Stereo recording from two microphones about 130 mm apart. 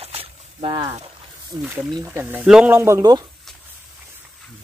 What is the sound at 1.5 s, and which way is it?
Speech, 40° right (ahead or behind).